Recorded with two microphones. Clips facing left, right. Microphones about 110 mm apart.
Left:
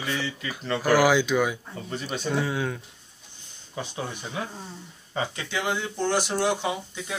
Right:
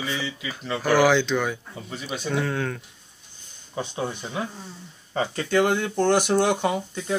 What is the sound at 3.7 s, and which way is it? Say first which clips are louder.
Speech: right 4 dB; 25° right (ahead or behind).